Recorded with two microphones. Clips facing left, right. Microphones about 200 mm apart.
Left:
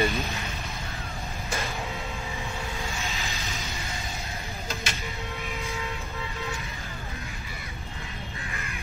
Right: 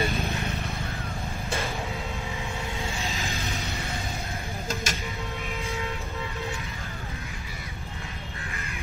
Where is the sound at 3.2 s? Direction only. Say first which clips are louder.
Right 3 dB; 55° right (ahead or behind).